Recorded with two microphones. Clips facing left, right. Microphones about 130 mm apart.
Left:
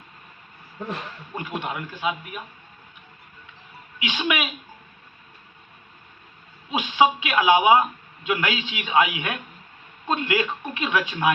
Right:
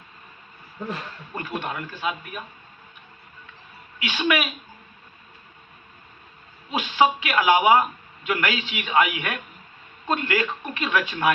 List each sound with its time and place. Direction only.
1.4 s speech: 15° left (ahead or behind)
4.0 s speech: 20° left (ahead or behind)
6.7 s speech: 20° left (ahead or behind)